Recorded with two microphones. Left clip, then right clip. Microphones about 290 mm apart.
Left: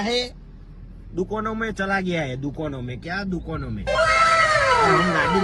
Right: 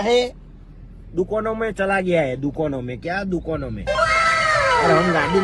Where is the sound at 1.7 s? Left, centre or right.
Centre.